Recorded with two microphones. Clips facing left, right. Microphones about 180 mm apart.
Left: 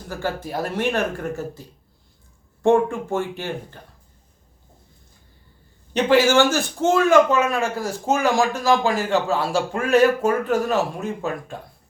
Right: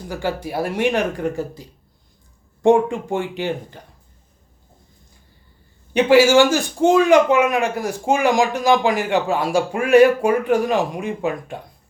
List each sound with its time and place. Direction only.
0.1 s a man's voice: 15° right (ahead or behind)
5.9 s a man's voice: 10° right (ahead or behind)